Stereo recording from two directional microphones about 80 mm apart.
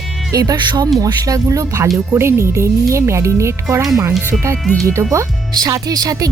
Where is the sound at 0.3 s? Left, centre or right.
Right.